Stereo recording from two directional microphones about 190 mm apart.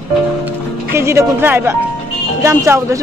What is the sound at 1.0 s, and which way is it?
Speech, 15° right (ahead or behind).